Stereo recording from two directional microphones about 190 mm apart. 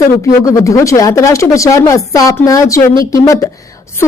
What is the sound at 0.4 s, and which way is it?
A woman's voice, 15° left (ahead or behind).